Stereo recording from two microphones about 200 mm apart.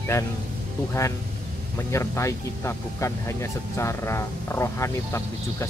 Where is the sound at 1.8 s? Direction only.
15° left (ahead or behind).